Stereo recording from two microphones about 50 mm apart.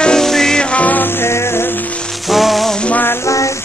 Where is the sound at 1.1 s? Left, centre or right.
Left.